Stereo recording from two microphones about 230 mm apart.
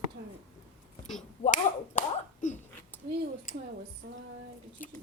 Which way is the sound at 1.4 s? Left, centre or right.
Left.